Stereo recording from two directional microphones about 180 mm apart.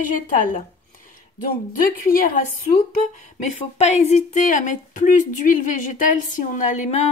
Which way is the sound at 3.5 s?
35° left (ahead or behind).